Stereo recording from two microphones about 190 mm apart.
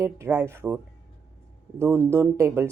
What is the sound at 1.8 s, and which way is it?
Speech, 15° right (ahead or behind).